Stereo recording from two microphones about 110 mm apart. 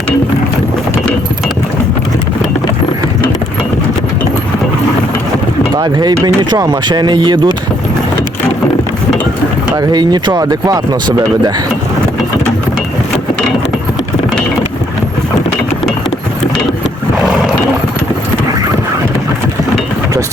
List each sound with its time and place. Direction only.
5.7 s speech: 40° right (ahead or behind)
9.7 s speech: 40° right (ahead or behind)